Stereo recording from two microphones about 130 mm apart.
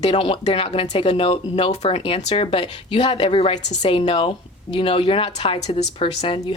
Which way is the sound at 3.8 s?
40° left (ahead or behind).